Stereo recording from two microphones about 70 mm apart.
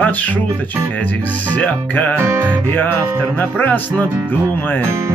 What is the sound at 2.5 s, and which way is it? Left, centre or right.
Music, left.